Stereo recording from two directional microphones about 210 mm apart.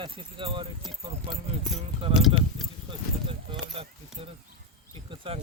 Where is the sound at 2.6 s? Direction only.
Centre (ahead or behind).